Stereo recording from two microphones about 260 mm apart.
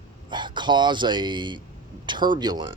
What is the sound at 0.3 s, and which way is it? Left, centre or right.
A man's voice, centre.